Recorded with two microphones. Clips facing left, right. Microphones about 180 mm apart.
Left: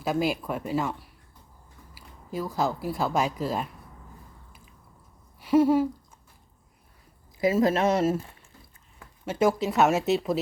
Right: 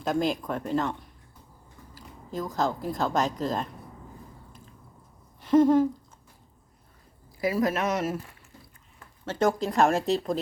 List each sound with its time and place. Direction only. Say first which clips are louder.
0.0 s speech: even; 5° left (ahead or behind)
5.4 s a sound: right 1 dB; 10° left (ahead or behind)
7.3 s speech: left 3 dB; 20° left (ahead or behind)
9.2 s speech: left 1 dB; 10° left (ahead or behind)